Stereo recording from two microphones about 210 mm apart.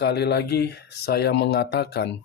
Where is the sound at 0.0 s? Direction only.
55° left (ahead or behind).